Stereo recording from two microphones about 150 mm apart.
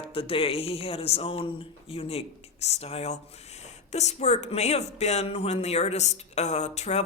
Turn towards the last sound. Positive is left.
turn(degrees=50)  # may be behind; listen again after turning